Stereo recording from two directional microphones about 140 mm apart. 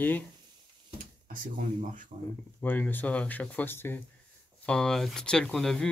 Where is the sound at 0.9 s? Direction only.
70° right (ahead or behind).